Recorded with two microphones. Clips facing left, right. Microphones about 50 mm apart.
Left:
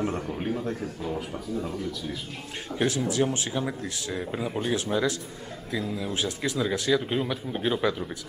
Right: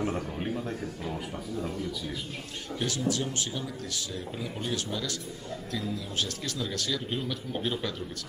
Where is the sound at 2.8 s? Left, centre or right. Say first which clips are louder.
Left 5 dB; left.